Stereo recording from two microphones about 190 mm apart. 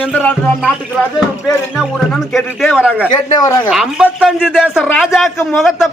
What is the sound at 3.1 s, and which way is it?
Speech, 20° left (ahead or behind).